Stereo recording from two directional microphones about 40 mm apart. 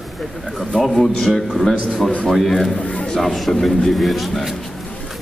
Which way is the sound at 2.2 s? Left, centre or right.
Centre.